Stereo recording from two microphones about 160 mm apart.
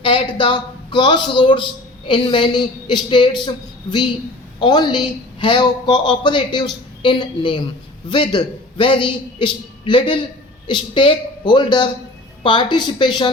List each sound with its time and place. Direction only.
0.0 s speech: 30° left (ahead or behind)